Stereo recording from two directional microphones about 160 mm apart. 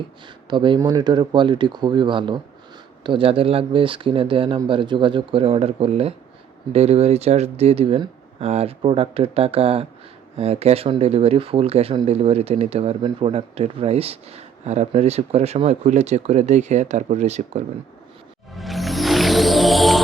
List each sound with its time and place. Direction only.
0.5 s speech: 30° right (ahead or behind)
18.5 s music: centre (ahead or behind)